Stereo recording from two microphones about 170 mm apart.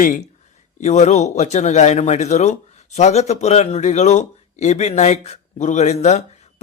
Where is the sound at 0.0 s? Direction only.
50° left (ahead or behind).